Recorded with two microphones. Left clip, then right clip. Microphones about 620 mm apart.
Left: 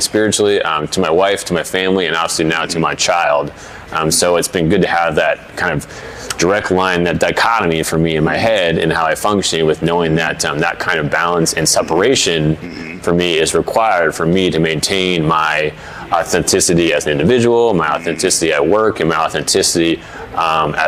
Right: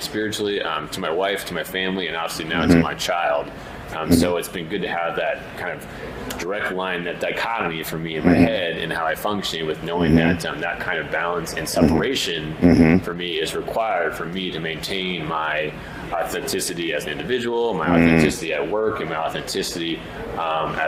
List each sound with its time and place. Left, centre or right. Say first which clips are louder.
0.2 s speech: left 10 dB; left